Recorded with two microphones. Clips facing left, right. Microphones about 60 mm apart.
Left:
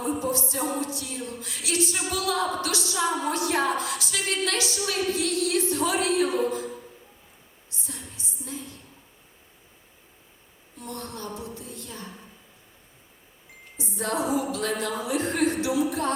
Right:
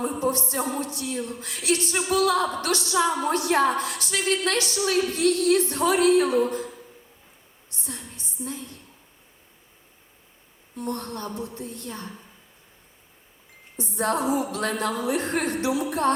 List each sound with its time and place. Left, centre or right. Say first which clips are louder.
0.0 s a woman's voice: right 2 dB; right
7.8 s a sound: right 2 dB; right
10.8 s a woman's voice: right 5 dB; right
13.7 s a woman's voice: right 3 dB; right